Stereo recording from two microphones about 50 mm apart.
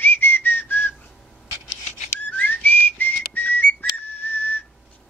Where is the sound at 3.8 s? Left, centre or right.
Left.